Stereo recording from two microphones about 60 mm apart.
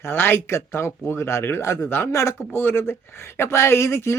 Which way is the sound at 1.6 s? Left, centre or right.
Left.